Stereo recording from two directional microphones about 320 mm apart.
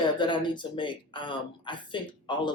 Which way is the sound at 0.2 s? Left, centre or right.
Centre.